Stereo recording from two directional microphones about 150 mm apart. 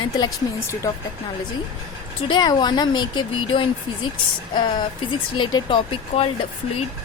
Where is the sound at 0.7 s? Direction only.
20° left (ahead or behind).